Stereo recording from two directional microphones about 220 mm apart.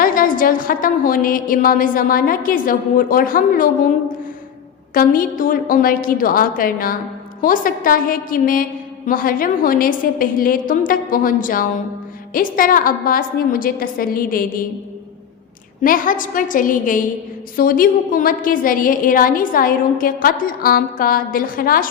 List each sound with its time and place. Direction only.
0.0 s a woman's voice: 40° left (ahead or behind)
4.9 s a woman's voice: 40° left (ahead or behind)
15.8 s a woman's voice: 40° left (ahead or behind)